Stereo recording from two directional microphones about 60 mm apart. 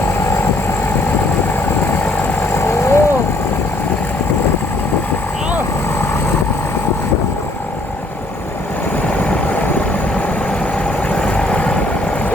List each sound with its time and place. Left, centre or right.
2.4 s vehicle: left
11.1 s vehicle: centre